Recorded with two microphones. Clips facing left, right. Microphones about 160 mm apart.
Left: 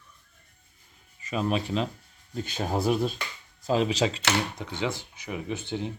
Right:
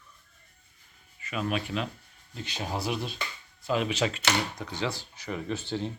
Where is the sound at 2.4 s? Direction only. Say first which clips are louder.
Left 5 dB; 50° left (ahead or behind).